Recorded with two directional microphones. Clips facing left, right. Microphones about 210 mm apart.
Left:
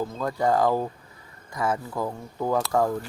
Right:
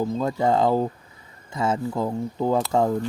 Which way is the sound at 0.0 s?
20° right (ahead or behind).